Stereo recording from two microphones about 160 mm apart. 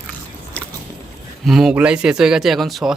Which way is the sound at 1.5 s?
5° right (ahead or behind).